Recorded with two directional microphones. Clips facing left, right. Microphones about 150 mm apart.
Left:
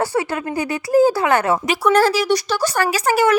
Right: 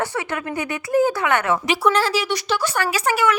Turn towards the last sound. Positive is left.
turn(degrees=40)  # may be behind; listen again after turning